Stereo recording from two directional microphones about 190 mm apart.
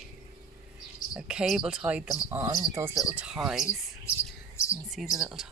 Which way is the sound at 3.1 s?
5° right (ahead or behind).